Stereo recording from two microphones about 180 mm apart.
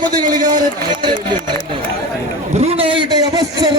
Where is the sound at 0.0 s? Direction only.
20° right (ahead or behind).